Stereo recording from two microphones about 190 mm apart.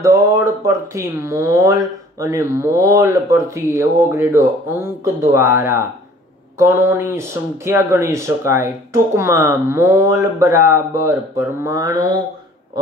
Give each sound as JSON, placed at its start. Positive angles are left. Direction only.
{"t": 0.0, "sound": "speech", "side_deg": -15}